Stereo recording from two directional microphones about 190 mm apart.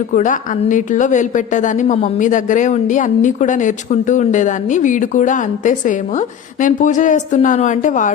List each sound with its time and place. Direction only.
0.1 s a woman's voice: 40° left (ahead or behind)